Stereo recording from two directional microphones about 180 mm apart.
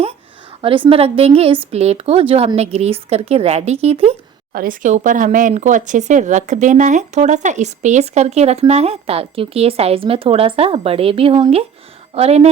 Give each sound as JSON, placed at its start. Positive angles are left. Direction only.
{"t": 0.6, "sound": "speech", "side_deg": -30}
{"t": 4.5, "sound": "speech", "side_deg": -50}